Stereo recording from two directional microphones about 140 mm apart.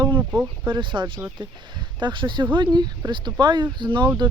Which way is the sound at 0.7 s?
35° right (ahead or behind).